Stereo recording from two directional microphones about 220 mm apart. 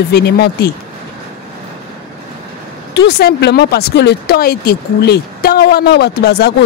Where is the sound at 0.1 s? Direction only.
45° left (ahead or behind).